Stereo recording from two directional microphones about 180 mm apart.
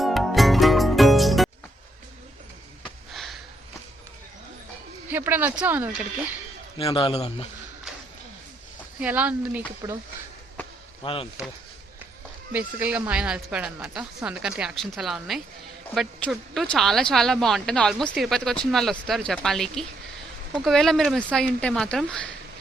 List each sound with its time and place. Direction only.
0.0 s music: centre (ahead or behind)
3.1 s sniff: centre (ahead or behind)
5.0 s speech: 10° right (ahead or behind)
6.9 s a man's voice: 30° left (ahead or behind)
9.0 s speech: 10° right (ahead or behind)
11.0 s speech: 30° left (ahead or behind)
12.5 s speech: 10° right (ahead or behind)